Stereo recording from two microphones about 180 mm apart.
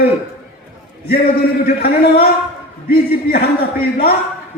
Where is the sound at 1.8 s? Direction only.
60° left (ahead or behind).